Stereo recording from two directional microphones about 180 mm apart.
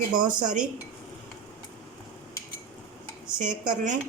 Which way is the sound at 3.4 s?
45° right (ahead or behind).